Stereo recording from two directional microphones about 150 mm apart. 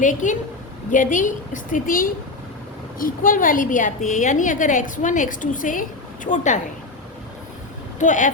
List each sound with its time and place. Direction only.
0.0 s a woman's voice: 60° left (ahead or behind)
7.9 s a woman's voice: 55° left (ahead or behind)